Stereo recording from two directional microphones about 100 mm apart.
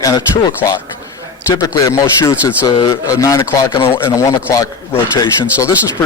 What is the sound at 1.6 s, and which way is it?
Speech, 35° left (ahead or behind).